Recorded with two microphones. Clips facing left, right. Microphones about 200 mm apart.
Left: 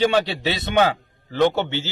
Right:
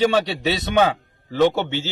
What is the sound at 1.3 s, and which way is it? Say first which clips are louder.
Speech: right 1 dB; 5° right (ahead or behind).